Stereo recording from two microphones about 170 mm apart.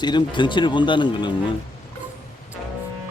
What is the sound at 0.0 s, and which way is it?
Speech, 25° left (ahead or behind).